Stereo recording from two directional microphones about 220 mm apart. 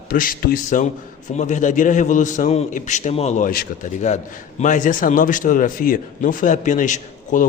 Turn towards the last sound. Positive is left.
turn(degrees=35)  # may be behind; listen again after turning